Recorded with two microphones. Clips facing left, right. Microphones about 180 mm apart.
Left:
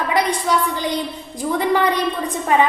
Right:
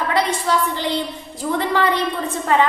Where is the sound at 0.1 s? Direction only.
15° left (ahead or behind).